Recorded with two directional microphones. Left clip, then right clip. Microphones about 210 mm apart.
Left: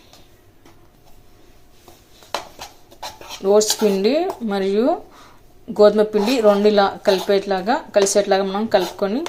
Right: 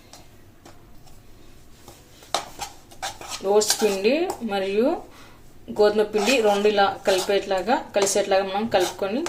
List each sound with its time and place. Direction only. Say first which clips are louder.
3.4 s speech: left 4 dB; 25° left (ahead or behind)